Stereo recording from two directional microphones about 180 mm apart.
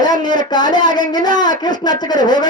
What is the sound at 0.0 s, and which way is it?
A man's voice, 25° left (ahead or behind).